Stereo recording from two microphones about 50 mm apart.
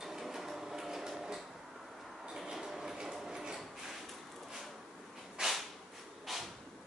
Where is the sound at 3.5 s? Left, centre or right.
Centre.